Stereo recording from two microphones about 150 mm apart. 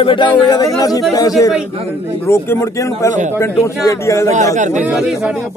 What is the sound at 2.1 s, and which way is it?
Speech, 15° left (ahead or behind).